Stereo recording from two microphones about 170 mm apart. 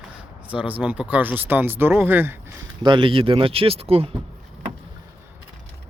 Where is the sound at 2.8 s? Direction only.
30° right (ahead or behind).